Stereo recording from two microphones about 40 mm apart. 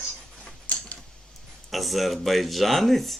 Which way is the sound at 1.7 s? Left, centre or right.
Centre.